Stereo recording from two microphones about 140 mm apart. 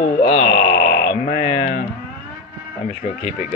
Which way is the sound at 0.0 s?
50° left (ahead or behind).